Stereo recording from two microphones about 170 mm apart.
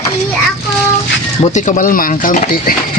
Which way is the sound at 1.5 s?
45° left (ahead or behind).